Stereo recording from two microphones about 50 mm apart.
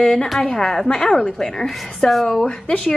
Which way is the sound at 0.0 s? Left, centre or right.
Centre.